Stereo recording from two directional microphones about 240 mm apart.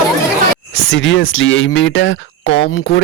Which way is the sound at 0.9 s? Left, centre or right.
Left.